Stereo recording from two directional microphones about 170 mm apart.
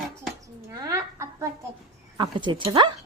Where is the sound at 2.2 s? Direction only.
25° right (ahead or behind).